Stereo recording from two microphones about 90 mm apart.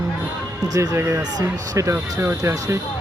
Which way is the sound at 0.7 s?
40° right (ahead or behind).